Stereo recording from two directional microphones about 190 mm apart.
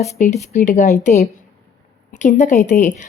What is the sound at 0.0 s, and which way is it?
Speech, 40° left (ahead or behind).